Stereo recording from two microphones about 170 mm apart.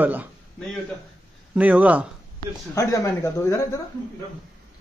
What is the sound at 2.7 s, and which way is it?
Speech, 15° left (ahead or behind).